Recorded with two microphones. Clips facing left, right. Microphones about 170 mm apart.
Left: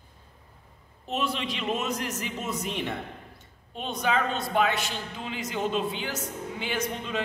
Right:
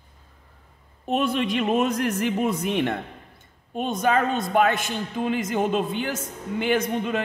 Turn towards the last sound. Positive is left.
turn(degrees=-55)  # may be behind; listen again after turning